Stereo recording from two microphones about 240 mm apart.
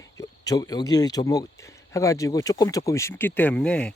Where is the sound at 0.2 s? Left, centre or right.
Centre.